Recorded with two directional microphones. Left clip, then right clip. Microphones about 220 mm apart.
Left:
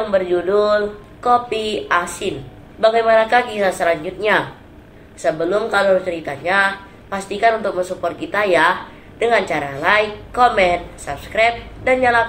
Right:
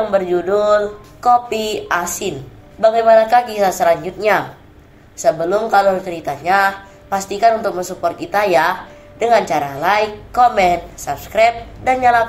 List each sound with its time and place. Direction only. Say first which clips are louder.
0.1 s speech: right 1 dB; 25° right (ahead or behind)